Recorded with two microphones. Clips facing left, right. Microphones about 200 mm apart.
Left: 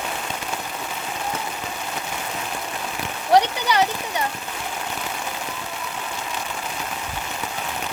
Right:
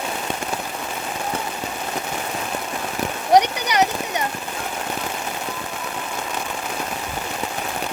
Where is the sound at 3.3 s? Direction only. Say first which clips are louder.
Right 1 dB; 15° right (ahead or behind).